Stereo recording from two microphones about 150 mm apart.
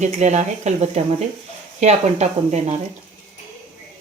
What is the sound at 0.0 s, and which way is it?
Speech, 50° right (ahead or behind).